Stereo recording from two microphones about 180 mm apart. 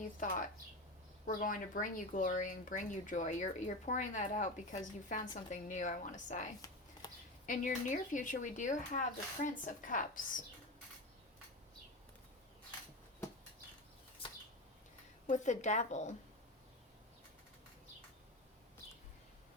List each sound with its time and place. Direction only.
1.3 s speech: 50° left (ahead or behind)
7.0 s a sound: 20° left (ahead or behind)
7.4 s speech: 45° left (ahead or behind)
15.3 s a woman's voice: 40° left (ahead or behind)